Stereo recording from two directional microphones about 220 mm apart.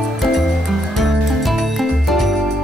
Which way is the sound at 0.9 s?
Centre (ahead or behind).